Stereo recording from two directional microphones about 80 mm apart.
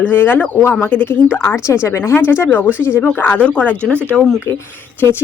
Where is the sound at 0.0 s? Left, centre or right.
Left.